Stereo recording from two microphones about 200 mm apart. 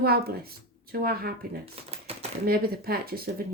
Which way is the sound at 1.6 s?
30° right (ahead or behind).